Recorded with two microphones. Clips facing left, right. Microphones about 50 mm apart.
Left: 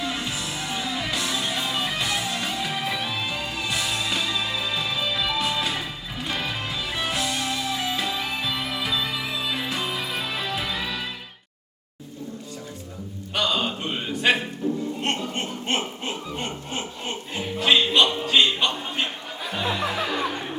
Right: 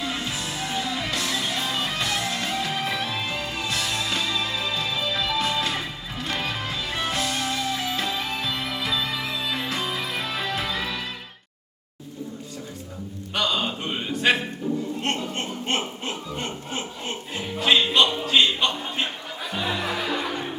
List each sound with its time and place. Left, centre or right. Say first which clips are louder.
0.3 s music: even; centre
3.1 s music: even; centre
13.3 s a sound: left 1 dB; centre
14.2 s bow-wow: even; centre
15.0 s chuckle: even; centre